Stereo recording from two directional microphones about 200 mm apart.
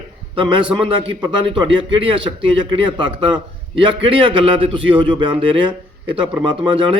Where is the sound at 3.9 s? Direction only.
25° right (ahead or behind).